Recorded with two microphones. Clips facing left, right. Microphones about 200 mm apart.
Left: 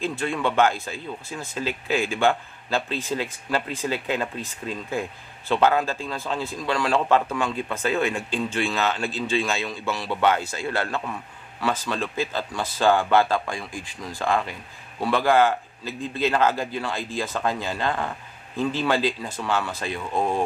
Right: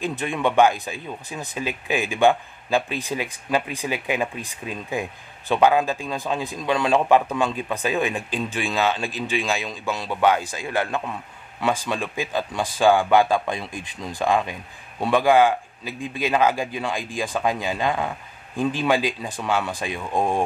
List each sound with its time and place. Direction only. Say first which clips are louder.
0.0 s speech: right 1 dB; 15° right (ahead or behind)